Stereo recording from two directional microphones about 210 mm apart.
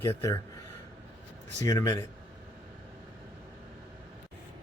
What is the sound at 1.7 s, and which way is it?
Speech, 15° left (ahead or behind).